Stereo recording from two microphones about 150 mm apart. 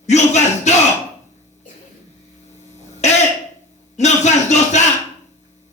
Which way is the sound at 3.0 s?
50° left (ahead or behind).